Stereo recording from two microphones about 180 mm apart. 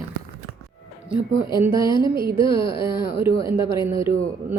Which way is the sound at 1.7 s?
25° left (ahead or behind).